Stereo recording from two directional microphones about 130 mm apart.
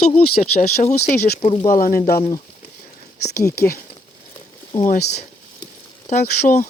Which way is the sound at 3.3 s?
20° left (ahead or behind).